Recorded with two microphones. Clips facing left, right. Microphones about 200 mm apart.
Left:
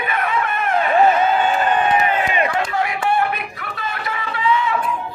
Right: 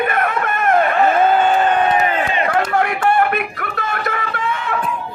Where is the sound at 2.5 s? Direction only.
55° right (ahead or behind).